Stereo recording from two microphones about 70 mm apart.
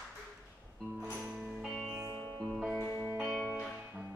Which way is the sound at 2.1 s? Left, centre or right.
Left.